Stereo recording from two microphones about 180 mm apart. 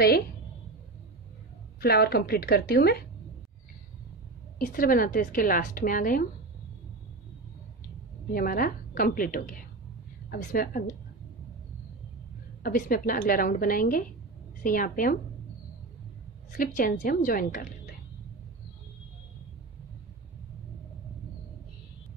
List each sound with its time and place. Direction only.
1.8 s a woman's voice: 60° left (ahead or behind)
4.6 s a woman's voice: 50° left (ahead or behind)
8.3 s a woman's voice: 55° left (ahead or behind)
12.6 s a woman's voice: 50° left (ahead or behind)
16.5 s a woman's voice: 50° left (ahead or behind)